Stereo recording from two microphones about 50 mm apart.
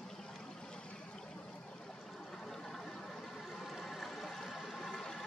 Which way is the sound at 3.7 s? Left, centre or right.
Centre.